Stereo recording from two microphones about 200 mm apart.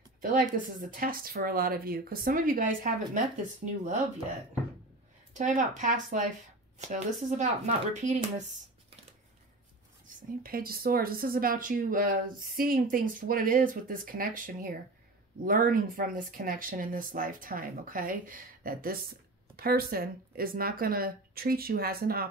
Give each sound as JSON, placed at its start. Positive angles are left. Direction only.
{"t": 0.2, "sound": "speech", "side_deg": -45}
{"t": 5.3, "sound": "speech", "side_deg": -40}
{"t": 10.0, "sound": "speech", "side_deg": -45}